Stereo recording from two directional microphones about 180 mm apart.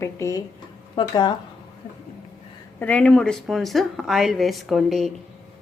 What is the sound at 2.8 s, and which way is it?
Speech, 10° left (ahead or behind).